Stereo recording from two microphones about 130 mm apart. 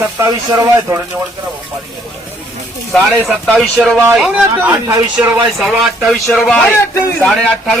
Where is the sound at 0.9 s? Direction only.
25° right (ahead or behind).